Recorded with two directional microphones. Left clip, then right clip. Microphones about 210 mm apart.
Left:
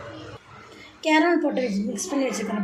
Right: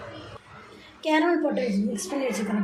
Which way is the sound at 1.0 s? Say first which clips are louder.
Left 3 dB; 15° left (ahead or behind).